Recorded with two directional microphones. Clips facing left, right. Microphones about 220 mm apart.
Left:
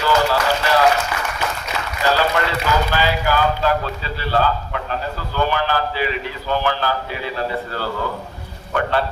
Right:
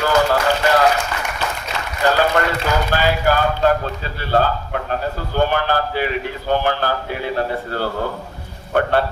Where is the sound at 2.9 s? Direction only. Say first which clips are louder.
Right 2 dB; 50° right (ahead or behind).